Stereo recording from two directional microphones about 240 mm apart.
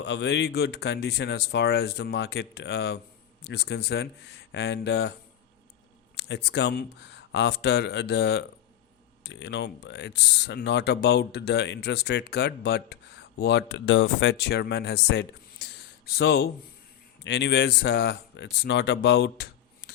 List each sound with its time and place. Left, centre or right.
0.0 s speech: left
6.1 s speech: left